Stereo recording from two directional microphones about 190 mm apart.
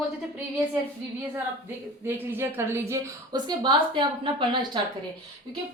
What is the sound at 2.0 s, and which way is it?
A woman's voice, 10° right (ahead or behind).